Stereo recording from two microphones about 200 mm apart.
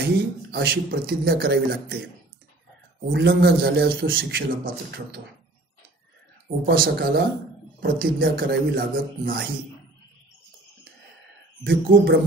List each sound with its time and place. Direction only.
0.0 s speech: 55° right (ahead or behind)
3.1 s speech: 60° right (ahead or behind)
6.6 s speech: 50° right (ahead or behind)
11.6 s speech: 55° right (ahead or behind)